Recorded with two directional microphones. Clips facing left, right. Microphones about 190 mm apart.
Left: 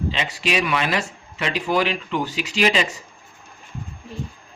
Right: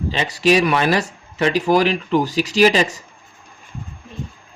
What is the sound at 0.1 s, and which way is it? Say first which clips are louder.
Speech: right 12 dB; 40° right (ahead or behind).